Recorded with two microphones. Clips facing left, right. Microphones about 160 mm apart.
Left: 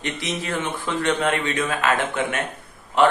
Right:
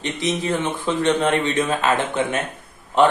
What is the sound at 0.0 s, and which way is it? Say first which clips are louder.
Speech: right 5 dB; 20° right (ahead or behind).